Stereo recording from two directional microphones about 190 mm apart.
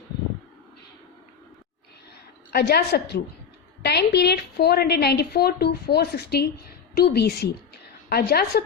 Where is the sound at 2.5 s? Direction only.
55° left (ahead or behind).